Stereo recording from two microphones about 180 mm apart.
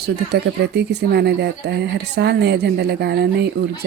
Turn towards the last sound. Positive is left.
turn(degrees=-65)  # may be behind; listen again after turning